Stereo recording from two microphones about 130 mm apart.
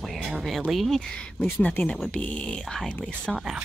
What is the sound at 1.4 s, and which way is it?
Speech, 15° left (ahead or behind).